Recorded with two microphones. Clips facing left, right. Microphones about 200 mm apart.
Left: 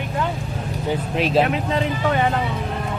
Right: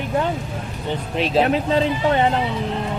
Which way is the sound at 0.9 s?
Centre (ahead or behind).